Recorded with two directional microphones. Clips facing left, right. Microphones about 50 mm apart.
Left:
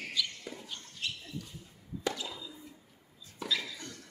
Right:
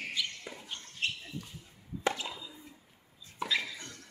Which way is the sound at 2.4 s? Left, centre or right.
Centre.